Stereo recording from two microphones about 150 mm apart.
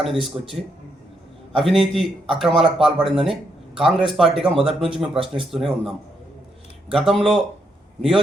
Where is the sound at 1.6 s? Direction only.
Centre (ahead or behind).